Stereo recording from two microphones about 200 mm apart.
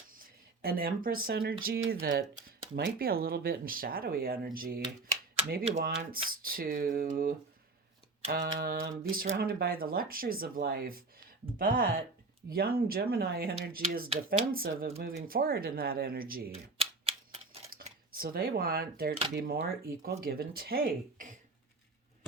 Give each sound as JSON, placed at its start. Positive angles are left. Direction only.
{"t": 0.2, "sound": "speech", "side_deg": -50}
{"t": 16.5, "sound": "typewriter", "side_deg": -30}
{"t": 18.1, "sound": "speech", "side_deg": -45}